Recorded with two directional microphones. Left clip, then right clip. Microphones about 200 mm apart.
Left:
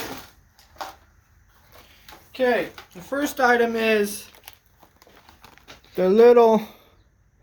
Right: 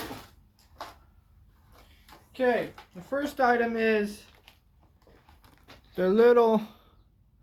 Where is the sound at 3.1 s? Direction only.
40° left (ahead or behind).